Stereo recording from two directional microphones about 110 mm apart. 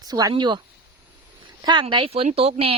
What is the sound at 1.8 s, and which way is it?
Speech, 60° right (ahead or behind).